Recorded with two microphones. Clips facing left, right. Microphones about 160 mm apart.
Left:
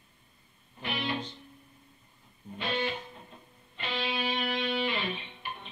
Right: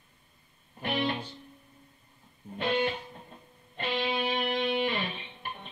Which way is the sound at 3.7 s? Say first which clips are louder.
Right 3 dB; 50° right (ahead or behind).